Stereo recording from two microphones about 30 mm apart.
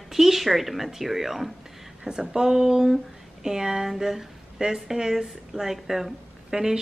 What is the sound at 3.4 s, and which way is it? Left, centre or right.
Speech, centre.